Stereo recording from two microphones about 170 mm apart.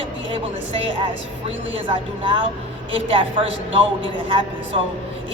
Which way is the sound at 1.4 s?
30° right (ahead or behind).